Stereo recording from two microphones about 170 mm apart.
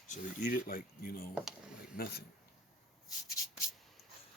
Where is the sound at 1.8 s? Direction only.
65° left (ahead or behind).